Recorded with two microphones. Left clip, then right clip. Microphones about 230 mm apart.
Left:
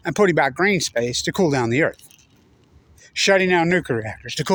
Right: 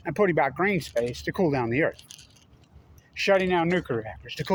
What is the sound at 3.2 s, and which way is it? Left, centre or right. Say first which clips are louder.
Speech: left 6 dB; left.